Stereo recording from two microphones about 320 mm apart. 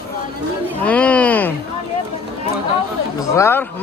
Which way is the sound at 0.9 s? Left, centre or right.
Centre.